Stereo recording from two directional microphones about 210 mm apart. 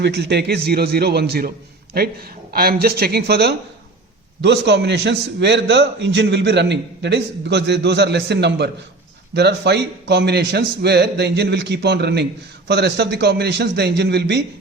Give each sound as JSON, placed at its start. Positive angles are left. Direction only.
{"t": 0.0, "sound": "a man's voice", "side_deg": -50}